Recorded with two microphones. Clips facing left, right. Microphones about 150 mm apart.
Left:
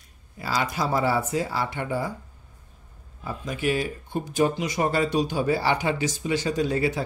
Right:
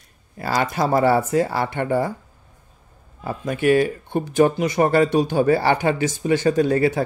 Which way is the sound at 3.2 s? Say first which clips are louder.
Right 8 dB; 60° right (ahead or behind).